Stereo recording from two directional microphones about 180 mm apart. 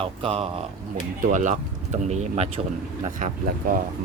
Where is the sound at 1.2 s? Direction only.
45° right (ahead or behind).